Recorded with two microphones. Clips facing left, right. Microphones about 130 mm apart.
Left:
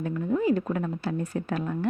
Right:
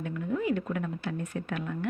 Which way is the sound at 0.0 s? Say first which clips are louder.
Left 5 dB; 35° left (ahead or behind).